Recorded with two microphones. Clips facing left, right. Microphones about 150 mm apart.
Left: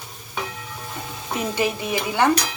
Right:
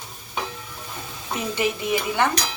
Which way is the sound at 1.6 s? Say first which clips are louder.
Right 1 dB; 20° left (ahead or behind).